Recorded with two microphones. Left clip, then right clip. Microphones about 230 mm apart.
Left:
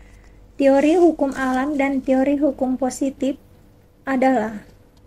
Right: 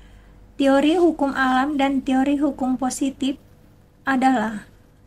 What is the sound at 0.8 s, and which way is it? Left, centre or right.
A woman's voice, right.